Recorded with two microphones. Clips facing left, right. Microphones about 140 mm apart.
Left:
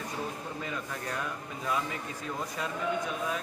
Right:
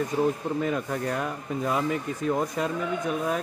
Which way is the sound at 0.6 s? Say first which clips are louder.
Right 10 dB; 50° right (ahead or behind).